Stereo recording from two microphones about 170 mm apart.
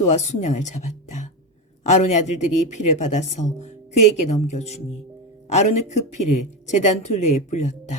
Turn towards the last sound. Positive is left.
turn(degrees=45)  # may be behind; listen again after turning